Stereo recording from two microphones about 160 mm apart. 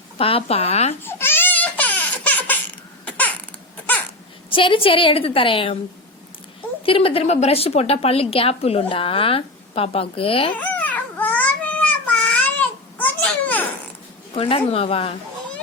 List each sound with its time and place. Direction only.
0.2 s a woman's voice: 35° left (ahead or behind)
1.0 s laughter: 15° left (ahead or behind)
3.0 s baby cry: 10° left (ahead or behind)
4.5 s a woman's voice: 35° left (ahead or behind)
6.8 s a woman's voice: 35° left (ahead or behind)
10.6 s baby cry: 10° left (ahead or behind)
14.3 s a woman's voice: 35° left (ahead or behind)